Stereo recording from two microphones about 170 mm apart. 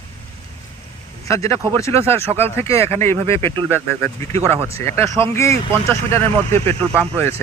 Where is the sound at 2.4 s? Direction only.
15° left (ahead or behind).